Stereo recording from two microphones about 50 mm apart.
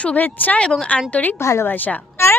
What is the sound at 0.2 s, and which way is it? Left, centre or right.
Speech, left.